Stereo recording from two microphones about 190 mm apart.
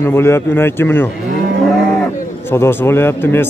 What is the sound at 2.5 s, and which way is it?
Speech, 10° left (ahead or behind).